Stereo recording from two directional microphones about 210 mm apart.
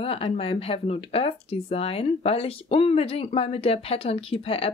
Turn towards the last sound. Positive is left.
turn(degrees=30)  # may be behind; listen again after turning